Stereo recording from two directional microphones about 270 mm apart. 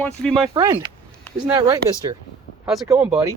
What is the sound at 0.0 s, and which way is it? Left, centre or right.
Speech, centre.